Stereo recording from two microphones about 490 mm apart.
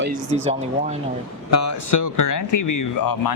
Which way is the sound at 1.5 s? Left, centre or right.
Left.